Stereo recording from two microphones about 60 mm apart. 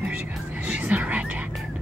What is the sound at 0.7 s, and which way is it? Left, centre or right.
Music, right.